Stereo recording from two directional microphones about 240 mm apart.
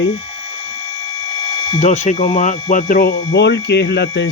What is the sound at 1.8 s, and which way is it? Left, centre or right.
Speech, left.